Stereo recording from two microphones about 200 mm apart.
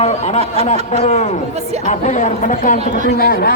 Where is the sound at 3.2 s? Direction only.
50° left (ahead or behind).